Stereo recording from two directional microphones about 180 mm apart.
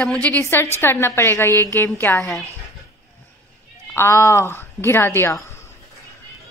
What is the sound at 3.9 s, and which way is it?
A woman's voice, 15° left (ahead or behind).